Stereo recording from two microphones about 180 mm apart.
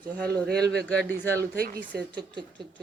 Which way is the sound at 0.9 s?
10° left (ahead or behind).